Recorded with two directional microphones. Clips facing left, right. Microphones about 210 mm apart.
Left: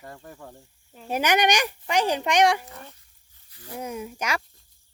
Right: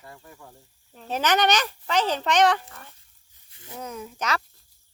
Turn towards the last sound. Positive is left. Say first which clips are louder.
# even
turn(degrees=10)  # may be behind; listen again after turning